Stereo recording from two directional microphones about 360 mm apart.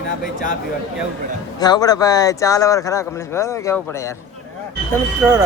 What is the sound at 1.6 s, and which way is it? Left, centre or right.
Speech, centre.